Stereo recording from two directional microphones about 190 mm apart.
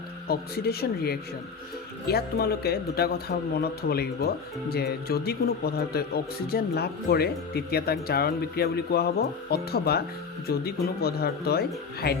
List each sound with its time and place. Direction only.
0.3 s speech: 55° left (ahead or behind)